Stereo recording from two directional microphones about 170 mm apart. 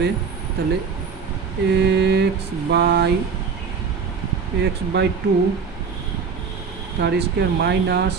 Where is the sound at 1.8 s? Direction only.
85° right.